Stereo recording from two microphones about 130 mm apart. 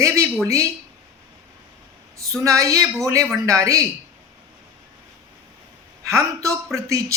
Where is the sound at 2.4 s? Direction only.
25° right (ahead or behind).